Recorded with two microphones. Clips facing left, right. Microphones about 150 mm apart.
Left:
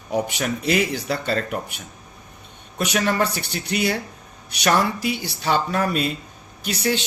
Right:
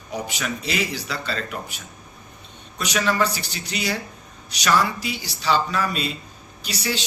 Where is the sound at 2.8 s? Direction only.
55° left (ahead or behind).